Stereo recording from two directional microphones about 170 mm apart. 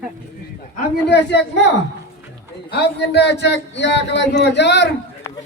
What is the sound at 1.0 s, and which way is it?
Speech, 90° left.